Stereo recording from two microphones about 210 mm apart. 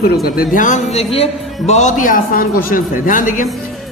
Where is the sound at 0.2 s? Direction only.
45° left (ahead or behind).